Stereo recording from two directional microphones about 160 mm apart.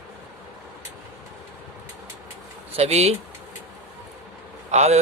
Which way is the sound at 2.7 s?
40° right (ahead or behind).